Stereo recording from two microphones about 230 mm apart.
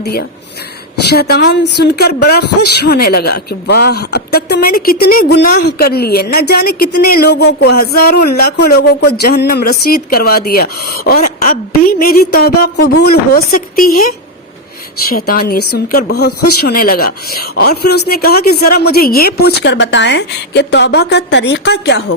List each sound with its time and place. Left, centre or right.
0.0 s speech: left
15.1 s speech: left